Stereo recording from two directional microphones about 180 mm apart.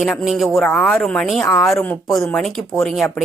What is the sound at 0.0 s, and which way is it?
A woman's voice, centre (ahead or behind).